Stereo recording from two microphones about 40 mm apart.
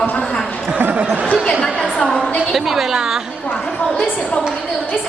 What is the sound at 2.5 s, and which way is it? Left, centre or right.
Speech, centre.